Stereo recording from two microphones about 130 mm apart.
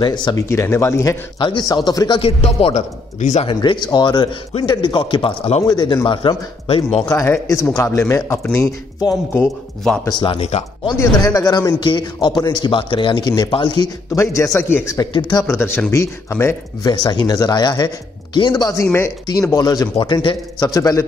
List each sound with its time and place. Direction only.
0.0 s speech: 35° left (ahead or behind)
0.4 s a man's voice: 20° left (ahead or behind)
1.4 s speech: 35° left (ahead or behind)
2.2 s a man's voice: 50° left (ahead or behind); by 3.4 s 65° left (ahead or behind)
3.4 s a man's voice: 35° left (ahead or behind)
7.1 s a man's voice: 20° left (ahead or behind)
10.1 s speech: 40° left (ahead or behind)
11.3 s a man's voice: 25° left (ahead or behind)
14.1 s a man's voice: 25° left (ahead or behind)
15.0 s speech: 30° left (ahead or behind)
15.4 s a man's voice: 20° left (ahead or behind)
16.8 s a man's voice: 35° left (ahead or behind)